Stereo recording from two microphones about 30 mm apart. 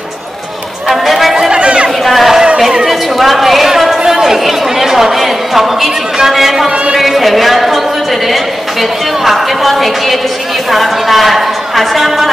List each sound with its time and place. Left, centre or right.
0.8 s run: centre
1.5 s chatter: right
2.0 s a sound: centre
6.1 s speech: centre
7.0 s a sound: centre
9.2 s a man's voice: centre